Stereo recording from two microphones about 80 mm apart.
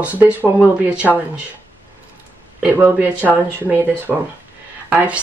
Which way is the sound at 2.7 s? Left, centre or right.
Right.